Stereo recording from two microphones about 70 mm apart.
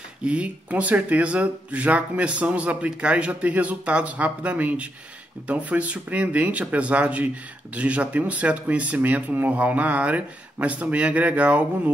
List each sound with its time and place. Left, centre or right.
0.2 s speech: centre